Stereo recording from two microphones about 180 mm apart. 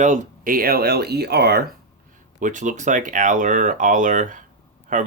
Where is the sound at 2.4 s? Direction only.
45° right (ahead or behind).